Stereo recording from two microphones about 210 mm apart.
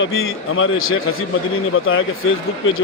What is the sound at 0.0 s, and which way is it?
A man's voice, 75° left (ahead or behind).